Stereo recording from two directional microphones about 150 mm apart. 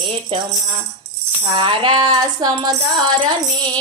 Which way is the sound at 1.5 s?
35° right (ahead or behind).